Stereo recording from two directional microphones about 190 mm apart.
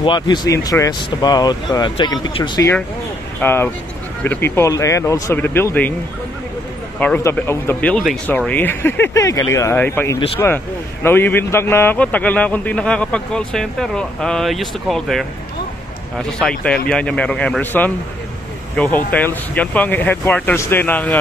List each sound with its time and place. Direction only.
0.0 s speech: 25° left (ahead or behind)
3.3 s speech: 10° left (ahead or behind)
7.0 s speech: 5° left (ahead or behind)